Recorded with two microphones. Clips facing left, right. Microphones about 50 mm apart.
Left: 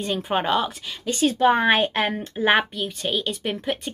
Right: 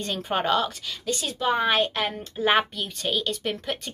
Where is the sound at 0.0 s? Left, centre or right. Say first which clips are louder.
Left 3 dB; centre.